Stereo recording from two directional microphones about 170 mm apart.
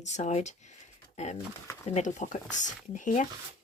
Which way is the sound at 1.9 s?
45° left (ahead or behind).